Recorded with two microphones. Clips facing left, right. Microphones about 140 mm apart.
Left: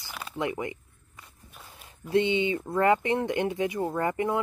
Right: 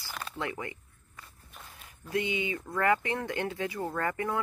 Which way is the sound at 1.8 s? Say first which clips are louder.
Left 7 dB; 25° left (ahead or behind).